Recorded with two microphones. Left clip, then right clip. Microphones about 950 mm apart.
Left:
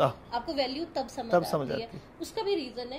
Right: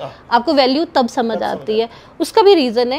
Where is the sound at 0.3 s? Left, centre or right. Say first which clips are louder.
Right 18 dB; right.